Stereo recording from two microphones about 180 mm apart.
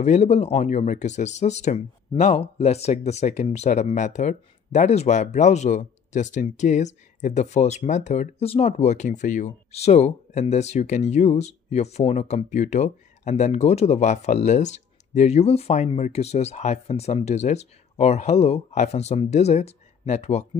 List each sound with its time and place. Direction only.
0.0 s speech: 40° left (ahead or behind)